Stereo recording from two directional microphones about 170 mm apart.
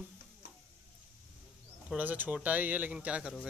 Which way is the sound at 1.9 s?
10° right (ahead or behind).